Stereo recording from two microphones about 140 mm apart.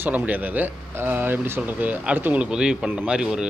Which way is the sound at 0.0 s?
10° right (ahead or behind).